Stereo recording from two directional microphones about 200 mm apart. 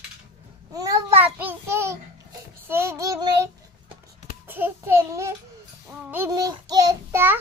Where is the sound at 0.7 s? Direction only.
15° right (ahead or behind).